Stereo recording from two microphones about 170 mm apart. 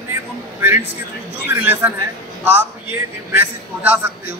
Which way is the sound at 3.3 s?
10° right (ahead or behind).